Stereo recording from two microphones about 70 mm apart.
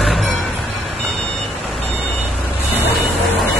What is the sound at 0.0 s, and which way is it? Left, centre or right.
Vehicle, centre.